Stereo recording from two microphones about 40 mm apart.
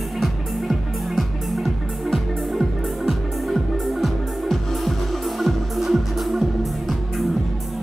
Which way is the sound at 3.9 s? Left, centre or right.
Centre.